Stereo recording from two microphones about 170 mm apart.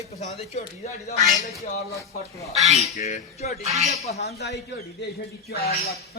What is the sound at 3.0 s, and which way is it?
Speech, 40° left (ahead or behind).